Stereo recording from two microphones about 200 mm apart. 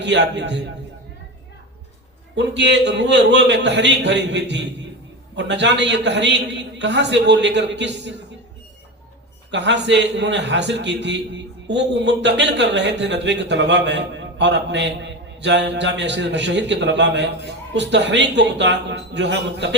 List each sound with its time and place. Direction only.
0.0 s a man's voice: 60° right (ahead or behind)
2.3 s a man's voice: 60° right (ahead or behind)
9.5 s a man's voice: 60° right (ahead or behind)